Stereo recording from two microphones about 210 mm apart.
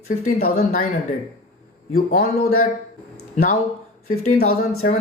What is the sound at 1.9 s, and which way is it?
Speech, 45° left (ahead or behind).